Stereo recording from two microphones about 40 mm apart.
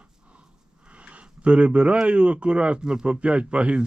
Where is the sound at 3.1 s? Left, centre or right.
Right.